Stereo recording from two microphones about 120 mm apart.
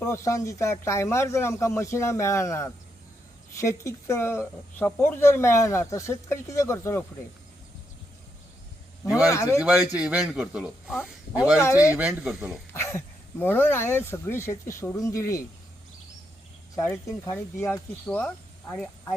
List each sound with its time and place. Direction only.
0.0 s speech: 25° left (ahead or behind)
9.3 s speech: 30° left (ahead or behind)
9.6 s a man's voice: 15° right (ahead or behind)
12.7 s speech: 20° left (ahead or behind)
16.7 s speech: 25° left (ahead or behind)